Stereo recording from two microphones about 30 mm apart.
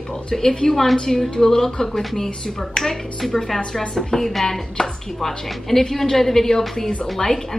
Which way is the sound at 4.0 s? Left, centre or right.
Centre.